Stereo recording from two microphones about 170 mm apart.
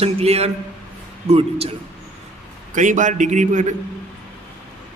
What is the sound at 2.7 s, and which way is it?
A man's voice, 50° right (ahead or behind).